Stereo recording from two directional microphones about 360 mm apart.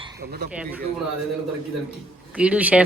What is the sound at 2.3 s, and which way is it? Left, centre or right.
Speech, centre.